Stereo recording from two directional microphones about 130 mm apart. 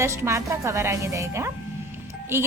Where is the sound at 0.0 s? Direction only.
20° right (ahead or behind).